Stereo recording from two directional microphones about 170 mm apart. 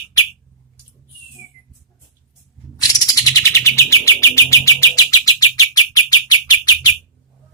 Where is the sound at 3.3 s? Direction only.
15° left (ahead or behind).